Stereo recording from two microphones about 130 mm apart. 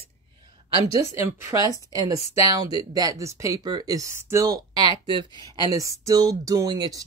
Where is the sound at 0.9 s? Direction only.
20° right (ahead or behind).